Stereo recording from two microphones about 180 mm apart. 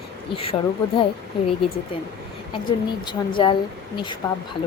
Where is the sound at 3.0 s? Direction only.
25° left (ahead or behind).